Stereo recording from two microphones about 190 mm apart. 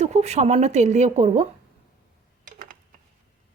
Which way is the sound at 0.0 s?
35° right (ahead or behind).